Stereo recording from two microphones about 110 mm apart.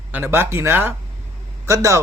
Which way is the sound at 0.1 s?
20° right (ahead or behind).